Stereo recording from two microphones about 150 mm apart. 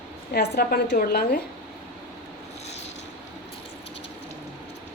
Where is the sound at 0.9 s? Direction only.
70° left (ahead or behind).